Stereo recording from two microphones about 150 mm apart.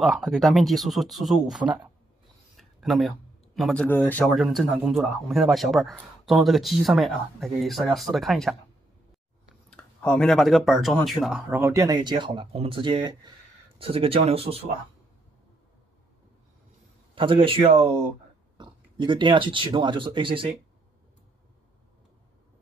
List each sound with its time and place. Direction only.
0.0 s speech: centre (ahead or behind)
2.5 s a sound: centre (ahead or behind)
3.5 s speech: 5° left (ahead or behind)
4.4 s speech: centre (ahead or behind)
9.7 s speech: 10° left (ahead or behind)
11.5 s speech: 20° right (ahead or behind); by 14.6 s 40° right (ahead or behind)
17.1 s speech: 35° right (ahead or behind)